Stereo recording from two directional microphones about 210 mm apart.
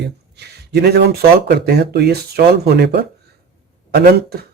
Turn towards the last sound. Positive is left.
turn(degrees=-50)  # may be behind; listen again after turning